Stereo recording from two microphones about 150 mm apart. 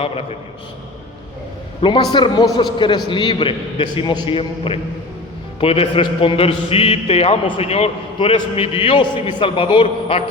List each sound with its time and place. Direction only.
1.8 s a man's voice: 30° left (ahead or behind)